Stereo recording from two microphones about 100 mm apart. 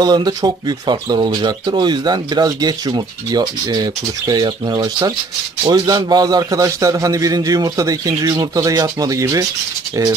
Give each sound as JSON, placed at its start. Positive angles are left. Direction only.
{"t": 0.0, "sound": "a man's voice", "side_deg": -40}